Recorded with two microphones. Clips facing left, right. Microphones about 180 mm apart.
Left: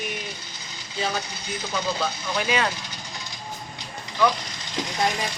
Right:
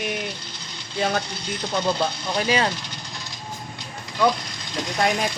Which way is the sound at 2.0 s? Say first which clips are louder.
Right 3 dB; 35° right (ahead or behind).